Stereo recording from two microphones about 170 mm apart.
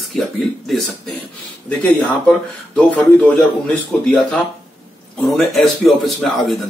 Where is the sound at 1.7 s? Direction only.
5° left (ahead or behind).